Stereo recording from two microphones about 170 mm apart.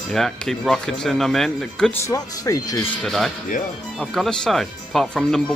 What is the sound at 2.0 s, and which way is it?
Speech, 20° left (ahead or behind).